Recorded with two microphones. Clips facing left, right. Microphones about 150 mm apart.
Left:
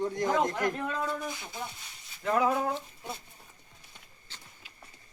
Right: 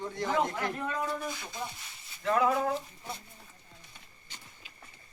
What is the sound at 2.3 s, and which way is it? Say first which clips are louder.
Speech: even; 5° left (ahead or behind).